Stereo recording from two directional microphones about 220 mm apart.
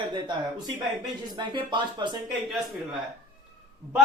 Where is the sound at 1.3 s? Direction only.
20° right (ahead or behind).